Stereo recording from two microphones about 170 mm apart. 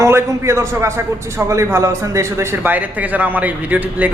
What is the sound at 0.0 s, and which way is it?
A man's voice, 15° right (ahead or behind).